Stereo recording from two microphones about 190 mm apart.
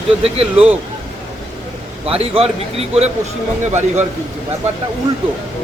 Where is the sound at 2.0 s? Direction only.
30° right (ahead or behind).